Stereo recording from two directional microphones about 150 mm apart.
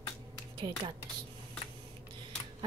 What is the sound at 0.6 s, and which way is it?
Speech, 30° right (ahead or behind).